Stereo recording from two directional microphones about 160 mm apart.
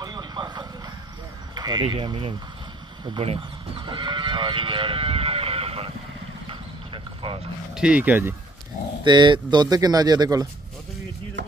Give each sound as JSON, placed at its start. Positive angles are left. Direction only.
{"t": 0.0, "sound": "vehicle", "side_deg": -25}
{"t": 1.5, "sound": "speech", "side_deg": -25}
{"t": 6.5, "sound": "a sound", "side_deg": -30}
{"t": 7.7, "sound": "speech", "side_deg": -5}
{"t": 9.0, "sound": "speech", "side_deg": -30}
{"t": 11.4, "sound": "a sound", "side_deg": -90}